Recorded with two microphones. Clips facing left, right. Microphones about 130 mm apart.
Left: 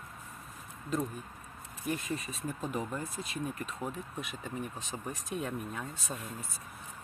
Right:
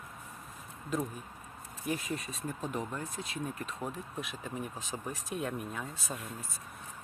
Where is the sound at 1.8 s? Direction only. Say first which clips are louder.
Even; centre (ahead or behind).